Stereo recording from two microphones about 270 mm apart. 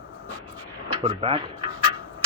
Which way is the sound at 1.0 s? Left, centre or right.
Centre.